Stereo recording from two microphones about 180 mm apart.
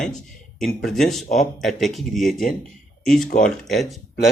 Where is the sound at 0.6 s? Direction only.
Centre (ahead or behind).